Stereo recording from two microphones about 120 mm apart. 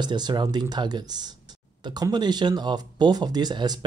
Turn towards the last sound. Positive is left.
turn(degrees=-35)  # may be behind; listen again after turning